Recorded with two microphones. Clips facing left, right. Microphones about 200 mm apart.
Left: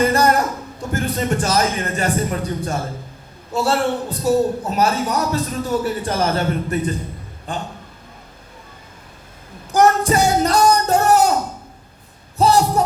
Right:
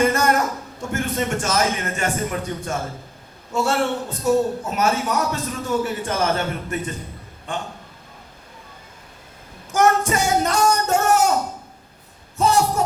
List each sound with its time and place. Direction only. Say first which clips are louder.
0.0 s a man's voice: left 2 dB; 35° left (ahead or behind)
9.7 s a man's voice: left 3 dB; 35° left (ahead or behind)
12.4 s speech: left 3 dB; 35° left (ahead or behind)